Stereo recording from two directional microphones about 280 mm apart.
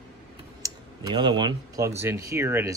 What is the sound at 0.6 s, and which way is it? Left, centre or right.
Speech, centre.